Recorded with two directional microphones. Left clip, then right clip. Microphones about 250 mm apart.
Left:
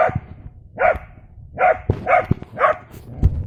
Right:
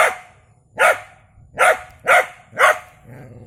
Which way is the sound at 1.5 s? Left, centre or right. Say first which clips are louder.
Right 1 dB; centre.